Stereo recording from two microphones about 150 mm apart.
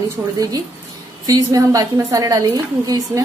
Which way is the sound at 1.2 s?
25° right (ahead or behind).